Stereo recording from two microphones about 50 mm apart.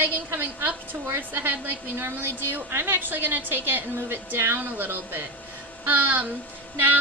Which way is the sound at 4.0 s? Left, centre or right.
Right.